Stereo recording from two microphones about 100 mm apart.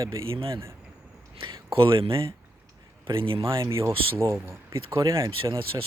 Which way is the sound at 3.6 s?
30° right (ahead or behind).